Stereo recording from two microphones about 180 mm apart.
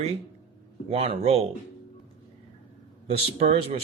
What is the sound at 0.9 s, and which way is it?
Speech, 35° right (ahead or behind).